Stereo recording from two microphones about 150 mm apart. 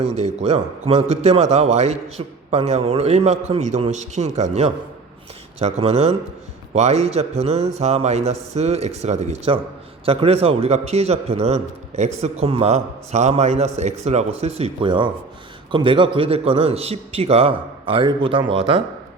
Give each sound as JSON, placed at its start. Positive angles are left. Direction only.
{"t": 0.2, "sound": "a man's voice", "side_deg": -45}